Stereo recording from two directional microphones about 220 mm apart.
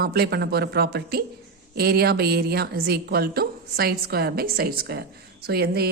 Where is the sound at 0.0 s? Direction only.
45° right (ahead or behind).